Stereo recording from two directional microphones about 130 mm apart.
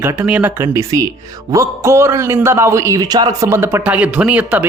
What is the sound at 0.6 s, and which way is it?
Speech, 25° right (ahead or behind).